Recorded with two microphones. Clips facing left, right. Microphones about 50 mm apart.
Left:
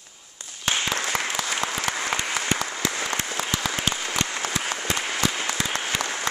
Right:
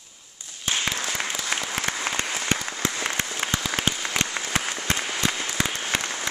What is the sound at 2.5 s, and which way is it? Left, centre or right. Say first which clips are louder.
Applause: left 2 dB; left.